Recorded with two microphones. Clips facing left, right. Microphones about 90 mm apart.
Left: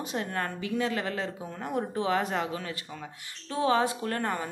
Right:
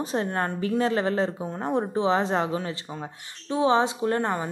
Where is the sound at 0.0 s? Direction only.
35° right (ahead or behind).